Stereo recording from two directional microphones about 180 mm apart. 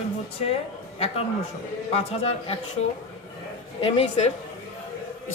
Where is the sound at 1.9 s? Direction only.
35° left (ahead or behind).